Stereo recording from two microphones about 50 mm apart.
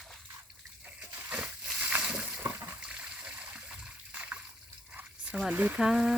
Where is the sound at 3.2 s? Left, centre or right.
Right.